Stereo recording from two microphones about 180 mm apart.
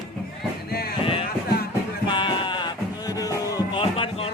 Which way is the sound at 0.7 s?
60° left (ahead or behind).